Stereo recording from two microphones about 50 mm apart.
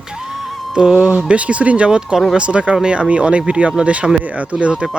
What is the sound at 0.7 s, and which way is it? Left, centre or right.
Speech, centre.